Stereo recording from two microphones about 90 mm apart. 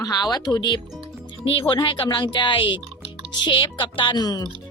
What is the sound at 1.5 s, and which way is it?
Speech, 80° left.